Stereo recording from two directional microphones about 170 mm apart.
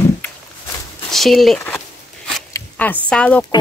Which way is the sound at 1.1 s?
Centre (ahead or behind).